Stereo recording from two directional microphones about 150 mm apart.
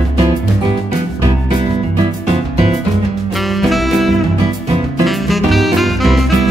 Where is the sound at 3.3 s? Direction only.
Centre (ahead or behind).